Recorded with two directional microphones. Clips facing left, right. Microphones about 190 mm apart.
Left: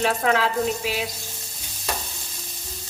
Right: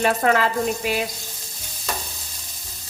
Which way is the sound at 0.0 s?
50° right (ahead or behind).